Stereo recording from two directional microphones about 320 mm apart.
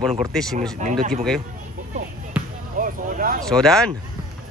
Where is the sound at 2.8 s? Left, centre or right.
Right.